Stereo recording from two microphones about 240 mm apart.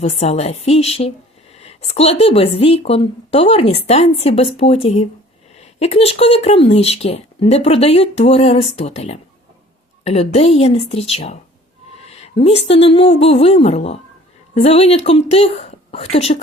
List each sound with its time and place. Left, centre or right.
0.0 s speech: left